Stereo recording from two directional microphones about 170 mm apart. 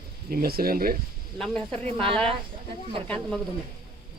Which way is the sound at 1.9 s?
30° right (ahead or behind).